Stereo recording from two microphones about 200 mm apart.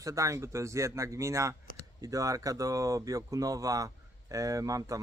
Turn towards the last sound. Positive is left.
turn(degrees=-15)  # may be behind; listen again after turning